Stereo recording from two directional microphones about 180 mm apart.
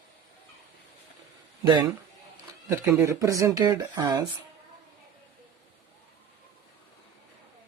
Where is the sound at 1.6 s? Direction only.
25° right (ahead or behind).